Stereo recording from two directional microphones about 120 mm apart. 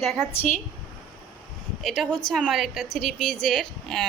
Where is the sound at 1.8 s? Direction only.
Centre (ahead or behind).